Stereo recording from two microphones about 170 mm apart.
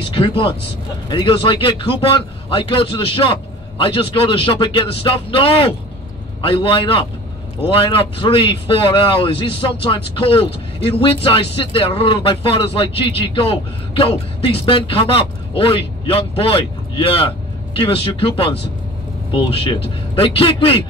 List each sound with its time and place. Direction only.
1.0 s speech: 30° left (ahead or behind)